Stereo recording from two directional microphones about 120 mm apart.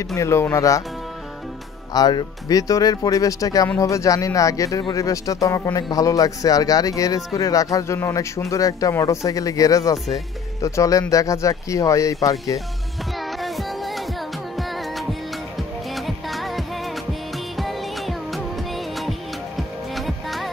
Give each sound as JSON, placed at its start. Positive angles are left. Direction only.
{"t": 0.1, "sound": "speech", "side_deg": 20}
{"t": 2.0, "sound": "speech", "side_deg": 35}
{"t": 13.4, "sound": "music", "side_deg": 0}
{"t": 16.1, "sound": "music", "side_deg": 0}